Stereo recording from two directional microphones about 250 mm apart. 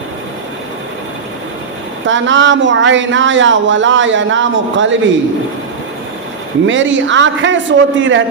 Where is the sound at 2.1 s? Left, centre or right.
Right.